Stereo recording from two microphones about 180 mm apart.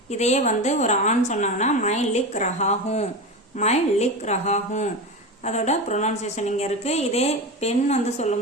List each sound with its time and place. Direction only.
0.1 s a woman's voice: 40° left (ahead or behind)